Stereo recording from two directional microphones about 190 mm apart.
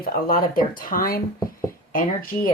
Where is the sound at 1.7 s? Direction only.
50° left (ahead or behind).